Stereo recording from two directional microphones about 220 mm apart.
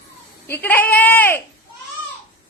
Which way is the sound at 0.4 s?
10° left (ahead or behind).